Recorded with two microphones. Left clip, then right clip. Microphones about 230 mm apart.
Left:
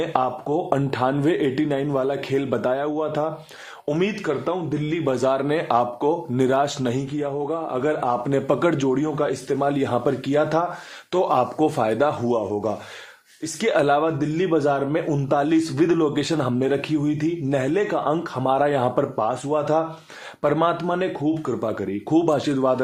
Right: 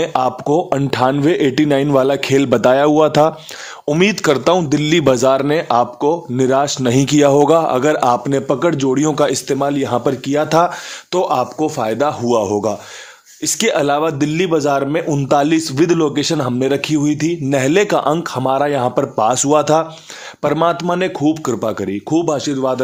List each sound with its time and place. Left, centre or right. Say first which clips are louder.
0.0 s a man's voice: right 6 dB; right
4.3 s a man's voice: right 11 dB; right
5.0 s a man's voice: right 6 dB; right
7.1 s a man's voice: right 15 dB; right
12.4 s a man's voice: right 8 dB; right
20.4 s a man's voice: right 5 dB; right
22.1 s speech: right 3 dB; centre